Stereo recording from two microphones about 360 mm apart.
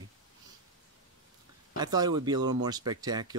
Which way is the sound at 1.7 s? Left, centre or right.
Centre.